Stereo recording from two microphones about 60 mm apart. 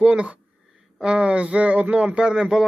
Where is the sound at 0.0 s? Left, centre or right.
Centre.